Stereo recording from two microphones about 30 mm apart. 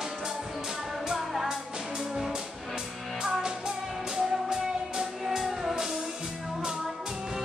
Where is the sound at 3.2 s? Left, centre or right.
Right.